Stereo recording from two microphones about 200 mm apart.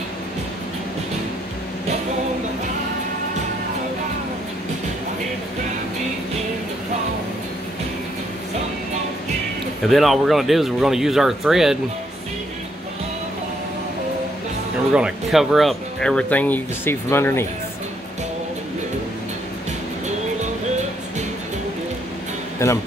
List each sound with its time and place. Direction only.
9.8 s speech: centre (ahead or behind)
14.9 s speech: 5° right (ahead or behind); by 17.5 s 10° left (ahead or behind)
22.6 s speech: 15° left (ahead or behind)